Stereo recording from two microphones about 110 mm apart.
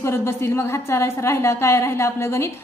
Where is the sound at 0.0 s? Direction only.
25° left (ahead or behind).